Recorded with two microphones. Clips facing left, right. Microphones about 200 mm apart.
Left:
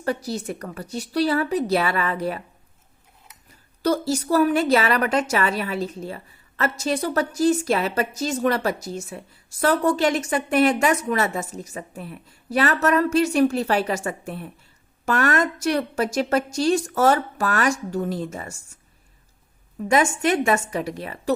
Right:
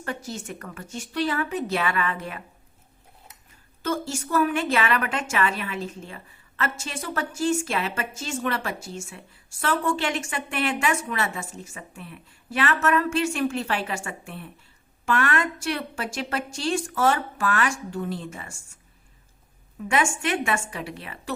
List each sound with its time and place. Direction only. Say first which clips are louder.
0.0 s a woman's voice: left 7 dB; 35° left (ahead or behind)
3.5 s a woman's voice: left 6 dB; 35° left (ahead or behind)
19.9 s a woman's voice: left 5 dB; 40° left (ahead or behind)